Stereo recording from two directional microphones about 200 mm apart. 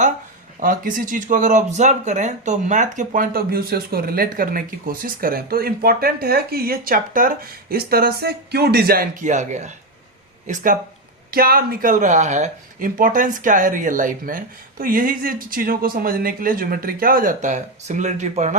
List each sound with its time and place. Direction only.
0.6 s speech: 40° right (ahead or behind)